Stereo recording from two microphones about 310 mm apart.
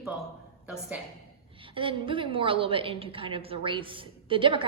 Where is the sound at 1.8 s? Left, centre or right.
Centre.